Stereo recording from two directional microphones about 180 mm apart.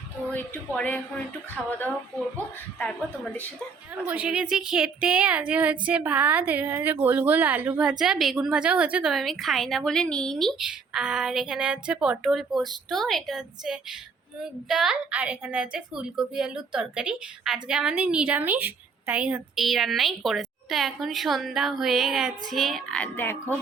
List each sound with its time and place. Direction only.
0.3 s speech: 10° left (ahead or behind)
4.0 s a woman's voice: 5° right (ahead or behind); by 23.6 s 10° left (ahead or behind)